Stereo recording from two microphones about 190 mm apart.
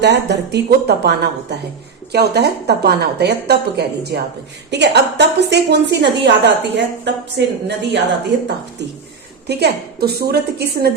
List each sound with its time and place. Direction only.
0.0 s a woman's voice: 65° right (ahead or behind)